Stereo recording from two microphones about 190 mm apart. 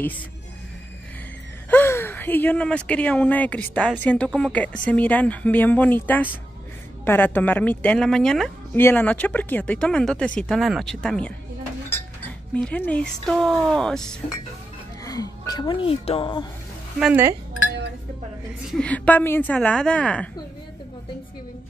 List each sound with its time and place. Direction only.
1.7 s speech: 10° left (ahead or behind)
12.5 s speech: 5° left (ahead or behind)
15.0 s speech: 20° left (ahead or behind)
17.0 s speech: 10° right (ahead or behind)
18.7 s speech: 5° left (ahead or behind)